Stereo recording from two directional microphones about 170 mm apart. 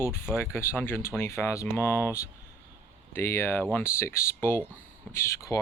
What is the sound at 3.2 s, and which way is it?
Speech, 15° left (ahead or behind).